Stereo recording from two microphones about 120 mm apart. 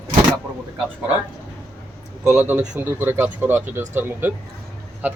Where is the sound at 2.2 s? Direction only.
5° right (ahead or behind).